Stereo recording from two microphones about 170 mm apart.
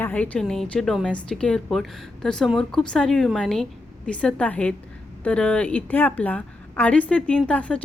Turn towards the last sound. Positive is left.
turn(degrees=10)  # may be behind; listen again after turning